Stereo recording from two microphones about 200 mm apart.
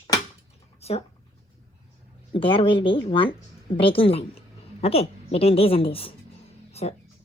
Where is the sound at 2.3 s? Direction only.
25° left (ahead or behind).